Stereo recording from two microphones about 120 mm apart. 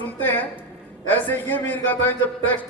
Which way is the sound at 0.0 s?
15° left (ahead or behind).